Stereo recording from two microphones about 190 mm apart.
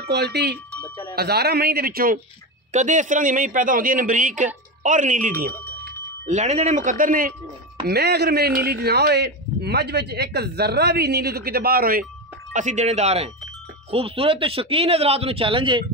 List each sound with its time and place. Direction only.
0.0 s a man's voice: 60° right (ahead or behind)
2.7 s a man's voice: 40° right (ahead or behind)
7.8 s a man's voice: 55° right (ahead or behind)
12.5 s speech: 40° right (ahead or behind)